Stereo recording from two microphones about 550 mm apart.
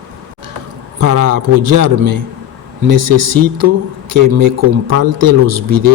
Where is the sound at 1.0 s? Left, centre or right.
Right.